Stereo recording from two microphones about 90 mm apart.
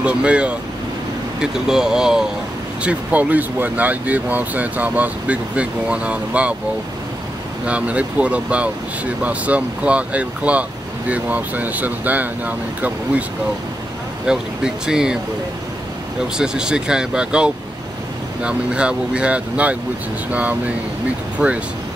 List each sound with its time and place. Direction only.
0.0 s speech: 10° right (ahead or behind)
7.6 s speech: 15° right (ahead or behind)
14.2 s speech: 5° right (ahead or behind)
16.3 s speech: 10° right (ahead or behind)